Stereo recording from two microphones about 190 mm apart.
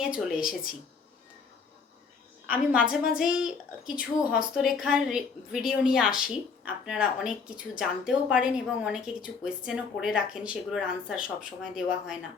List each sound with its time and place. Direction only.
0.0 s a woman's voice: 5° right (ahead or behind)
2.5 s a woman's voice: 5° right (ahead or behind)